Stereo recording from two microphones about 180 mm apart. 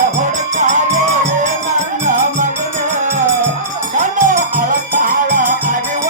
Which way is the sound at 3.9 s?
45° right (ahead or behind).